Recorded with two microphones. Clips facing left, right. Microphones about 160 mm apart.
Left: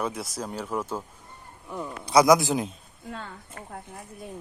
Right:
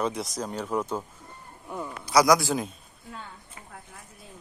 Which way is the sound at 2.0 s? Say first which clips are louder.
Left 2 dB; 25° left (ahead or behind).